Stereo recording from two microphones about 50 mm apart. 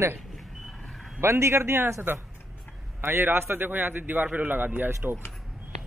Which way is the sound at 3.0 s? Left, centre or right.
Right.